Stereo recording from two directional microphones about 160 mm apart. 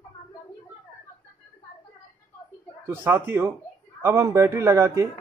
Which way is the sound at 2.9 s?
15° right (ahead or behind).